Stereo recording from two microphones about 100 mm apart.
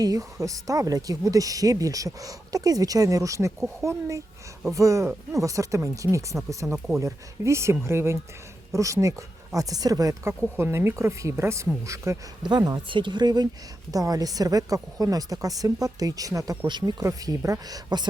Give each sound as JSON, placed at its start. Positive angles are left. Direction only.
{"t": 0.0, "sound": "speech", "side_deg": -35}
{"t": 6.7, "sound": "speech", "side_deg": -10}
{"t": 7.0, "sound": "speech", "side_deg": -30}
{"t": 10.6, "sound": "speech", "side_deg": -25}
{"t": 12.4, "sound": "speech", "side_deg": -45}
{"t": 16.6, "sound": "speech", "side_deg": -50}
{"t": 17.0, "sound": "speech", "side_deg": -35}